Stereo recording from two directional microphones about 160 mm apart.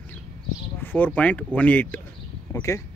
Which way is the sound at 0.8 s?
10° left (ahead or behind).